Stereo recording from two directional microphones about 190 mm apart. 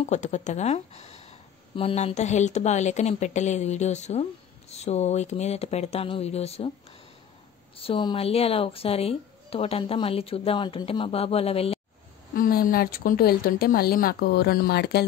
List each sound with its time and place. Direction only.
0.0 s speech: 35° left (ahead or behind)
7.7 s speech: 30° left (ahead or behind)
12.4 s a woman's voice: 50° left (ahead or behind)